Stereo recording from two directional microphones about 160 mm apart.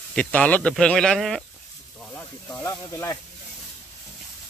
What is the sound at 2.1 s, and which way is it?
Snake, 15° left (ahead or behind).